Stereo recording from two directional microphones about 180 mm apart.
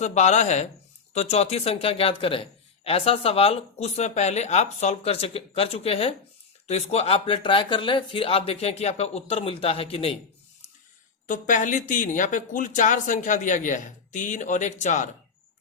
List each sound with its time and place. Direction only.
0.0 s speech: 40° left (ahead or behind)
11.3 s speech: 45° left (ahead or behind)